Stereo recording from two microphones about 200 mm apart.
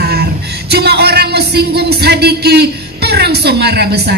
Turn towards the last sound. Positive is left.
turn(degrees=-55)  # may be behind; listen again after turning